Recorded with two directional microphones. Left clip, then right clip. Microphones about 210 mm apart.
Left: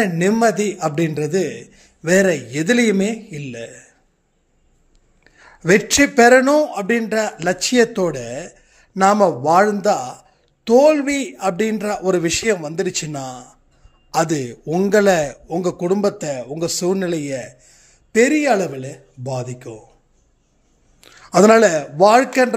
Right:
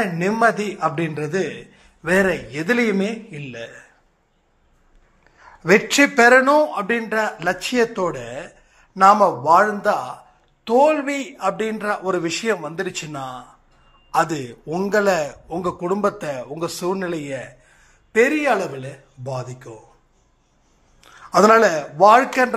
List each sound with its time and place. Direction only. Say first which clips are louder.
0.0 s speech: left 2 dB; 55° left (ahead or behind)
5.2 s speech: left 3 dB; 45° left (ahead or behind)
21.0 s a man's voice: left 2 dB; 55° left (ahead or behind)